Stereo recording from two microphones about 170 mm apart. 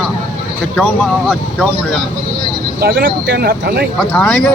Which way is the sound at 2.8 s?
60° right (ahead or behind).